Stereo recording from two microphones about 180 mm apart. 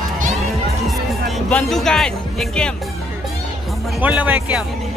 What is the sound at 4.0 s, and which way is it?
Speech, 10° right (ahead or behind).